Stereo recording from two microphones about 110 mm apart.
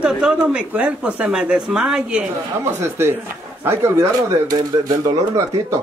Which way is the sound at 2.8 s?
20° right (ahead or behind).